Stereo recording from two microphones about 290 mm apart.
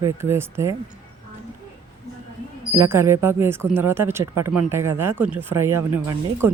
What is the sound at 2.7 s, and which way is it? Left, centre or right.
Speech, centre.